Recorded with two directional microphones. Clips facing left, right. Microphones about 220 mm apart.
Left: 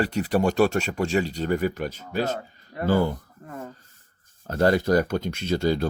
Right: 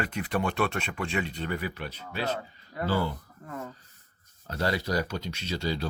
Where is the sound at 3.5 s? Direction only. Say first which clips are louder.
Left 1 dB; 25° left (ahead or behind).